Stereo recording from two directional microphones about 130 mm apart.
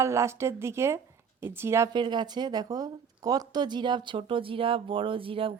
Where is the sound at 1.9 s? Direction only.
35° right (ahead or behind).